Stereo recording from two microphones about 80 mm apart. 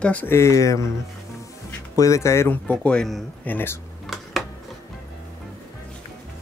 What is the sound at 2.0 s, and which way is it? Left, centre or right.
Speech, left.